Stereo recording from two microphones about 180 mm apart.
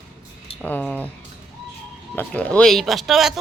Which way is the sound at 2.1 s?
5° left (ahead or behind).